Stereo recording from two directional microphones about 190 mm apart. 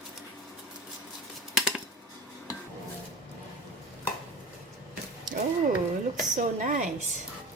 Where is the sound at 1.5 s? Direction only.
5° right (ahead or behind).